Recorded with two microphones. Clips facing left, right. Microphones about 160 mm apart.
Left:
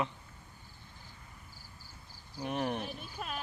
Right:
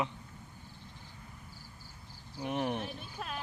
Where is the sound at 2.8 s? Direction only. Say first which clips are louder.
Even; 5° left (ahead or behind).